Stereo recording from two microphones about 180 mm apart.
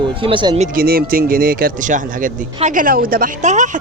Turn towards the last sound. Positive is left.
turn(degrees=-45)  # may be behind; listen again after turning